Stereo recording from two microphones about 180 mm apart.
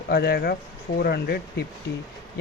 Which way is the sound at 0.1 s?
60° left (ahead or behind).